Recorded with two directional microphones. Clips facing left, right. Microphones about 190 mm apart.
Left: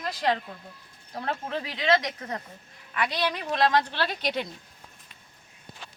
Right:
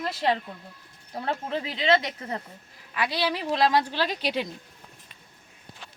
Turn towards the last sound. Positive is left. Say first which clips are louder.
# right 1 dB
turn(degrees=-10)  # may be behind; listen again after turning